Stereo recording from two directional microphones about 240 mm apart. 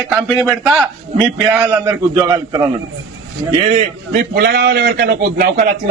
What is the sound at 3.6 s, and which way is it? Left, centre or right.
A man's voice, right.